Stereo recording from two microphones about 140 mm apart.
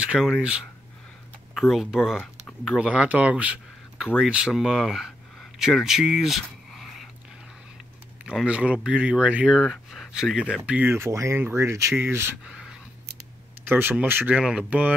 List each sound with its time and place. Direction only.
0.0 s speech: 5° right (ahead or behind)
8.3 s speech: 5° right (ahead or behind)
13.7 s speech: 15° right (ahead or behind)